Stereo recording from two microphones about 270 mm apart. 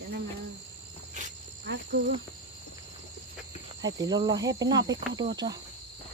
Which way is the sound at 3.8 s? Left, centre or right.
Centre.